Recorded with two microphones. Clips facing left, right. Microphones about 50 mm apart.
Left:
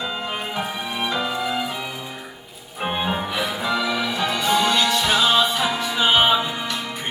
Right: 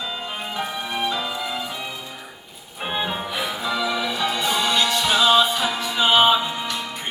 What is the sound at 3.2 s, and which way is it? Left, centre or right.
Music, left.